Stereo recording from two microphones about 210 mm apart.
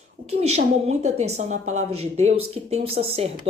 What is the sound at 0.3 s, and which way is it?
A woman's voice, 30° right (ahead or behind).